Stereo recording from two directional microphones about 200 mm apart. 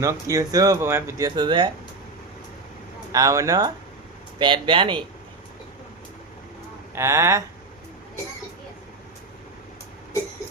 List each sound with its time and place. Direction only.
0.0 s speech: 15° right (ahead or behind)
3.1 s speech: 15° right (ahead or behind)
6.9 s speech: 15° right (ahead or behind)